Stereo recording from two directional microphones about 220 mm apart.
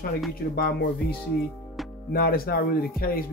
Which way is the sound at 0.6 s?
45° left (ahead or behind).